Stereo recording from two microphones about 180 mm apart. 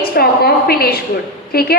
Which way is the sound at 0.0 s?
60° left (ahead or behind).